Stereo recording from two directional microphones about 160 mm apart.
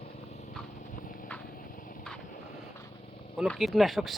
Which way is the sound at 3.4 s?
Centre (ahead or behind).